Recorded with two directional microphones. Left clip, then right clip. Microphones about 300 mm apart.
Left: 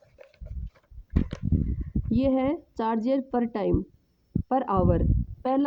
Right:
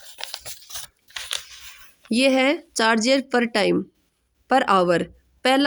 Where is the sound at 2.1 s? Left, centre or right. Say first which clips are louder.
Right 7 dB; left.